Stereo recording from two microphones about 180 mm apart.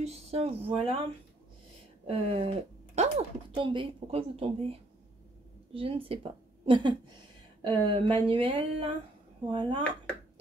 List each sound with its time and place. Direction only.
0.0 s speech: 35° right (ahead or behind)
2.0 s speech: 30° right (ahead or behind)